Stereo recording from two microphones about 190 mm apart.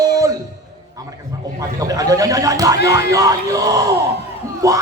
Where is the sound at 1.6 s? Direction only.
20° right (ahead or behind).